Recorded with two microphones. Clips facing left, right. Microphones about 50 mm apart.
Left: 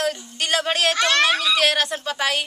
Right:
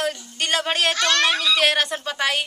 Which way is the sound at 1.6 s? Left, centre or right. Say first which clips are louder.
Even; centre.